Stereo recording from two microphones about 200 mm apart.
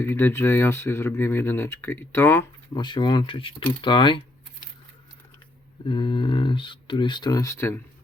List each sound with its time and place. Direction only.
0.0 s speech: 10° left (ahead or behind)
2.7 s speech: 20° left (ahead or behind)
5.9 s speech: 25° left (ahead or behind)